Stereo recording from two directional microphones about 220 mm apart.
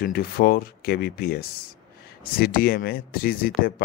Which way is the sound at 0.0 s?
40° left (ahead or behind).